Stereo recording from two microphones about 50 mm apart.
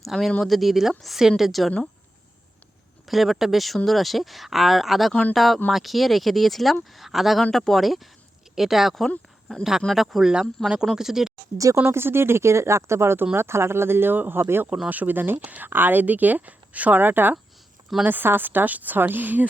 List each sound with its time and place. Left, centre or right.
0.0 s speech: centre
3.1 s speech: centre
10.9 s speech: centre
11.5 s speech: right
11.8 s speech: right
13.3 s speech: right
14.8 s speech: right